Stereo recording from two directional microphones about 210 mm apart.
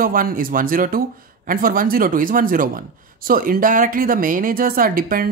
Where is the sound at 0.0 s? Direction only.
40° right (ahead or behind).